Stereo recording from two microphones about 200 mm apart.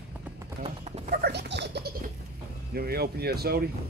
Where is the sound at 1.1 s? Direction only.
55° right (ahead or behind).